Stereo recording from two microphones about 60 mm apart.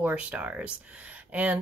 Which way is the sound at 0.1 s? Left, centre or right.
Right.